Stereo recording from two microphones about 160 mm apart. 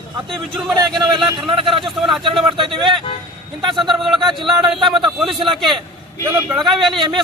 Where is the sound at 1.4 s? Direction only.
35° right (ahead or behind).